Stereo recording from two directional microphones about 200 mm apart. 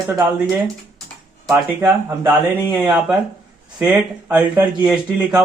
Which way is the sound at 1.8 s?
10° right (ahead or behind).